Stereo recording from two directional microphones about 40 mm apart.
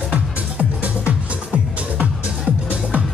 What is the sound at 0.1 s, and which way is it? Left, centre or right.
Music, right.